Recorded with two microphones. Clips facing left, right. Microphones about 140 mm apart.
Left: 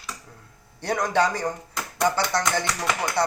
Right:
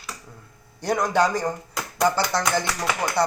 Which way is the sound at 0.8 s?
10° right (ahead or behind).